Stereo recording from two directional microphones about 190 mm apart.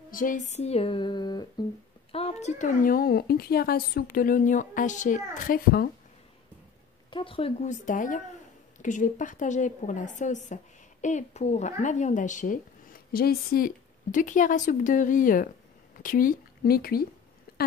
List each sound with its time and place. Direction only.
0.1 s a woman's voice: 45° left (ahead or behind); by 1.5 s 20° left (ahead or behind)
2.1 s a woman's voice: 35° left (ahead or behind); by 5.9 s 50° left (ahead or behind)
7.1 s a woman's voice: 25° left (ahead or behind); by 17.0 s 50° left (ahead or behind)